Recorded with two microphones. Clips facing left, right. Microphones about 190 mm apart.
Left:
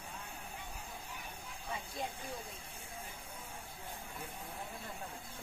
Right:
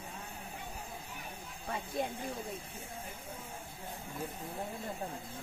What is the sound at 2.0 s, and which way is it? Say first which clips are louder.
Speech: right 7 dB; 55° right (ahead or behind).